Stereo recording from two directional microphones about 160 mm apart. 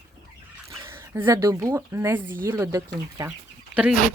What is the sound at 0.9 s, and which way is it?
Speech, 15° right (ahead or behind).